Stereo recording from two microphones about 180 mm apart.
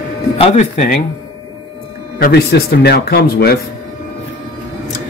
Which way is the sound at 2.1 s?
60° left (ahead or behind).